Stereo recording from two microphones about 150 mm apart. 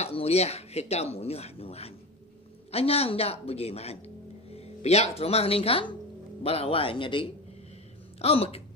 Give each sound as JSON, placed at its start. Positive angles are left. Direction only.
{"t": 0.0, "sound": "speech", "side_deg": 45}